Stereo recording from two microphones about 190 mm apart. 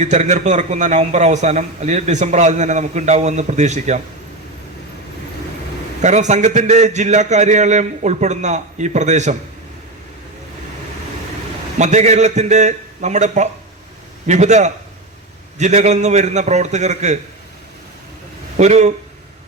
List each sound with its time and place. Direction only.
0.0 s a man's voice: 40° right (ahead or behind)
6.0 s a man's voice: 40° right (ahead or behind)
11.8 s a man's voice: 40° right (ahead or behind)
18.5 s speech: 40° right (ahead or behind)